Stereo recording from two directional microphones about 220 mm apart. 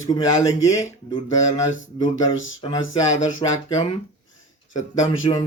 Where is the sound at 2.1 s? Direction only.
60° left (ahead or behind).